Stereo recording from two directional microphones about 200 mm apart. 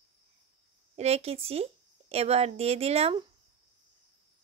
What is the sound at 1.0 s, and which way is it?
A woman's voice, 30° right (ahead or behind).